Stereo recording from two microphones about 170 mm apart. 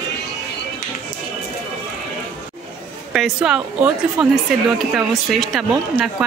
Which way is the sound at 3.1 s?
5° right (ahead or behind).